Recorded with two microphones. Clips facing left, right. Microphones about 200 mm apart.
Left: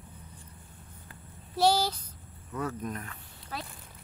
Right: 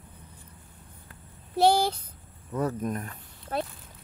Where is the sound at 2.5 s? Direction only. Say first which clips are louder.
Right 5 dB; 40° right (ahead or behind).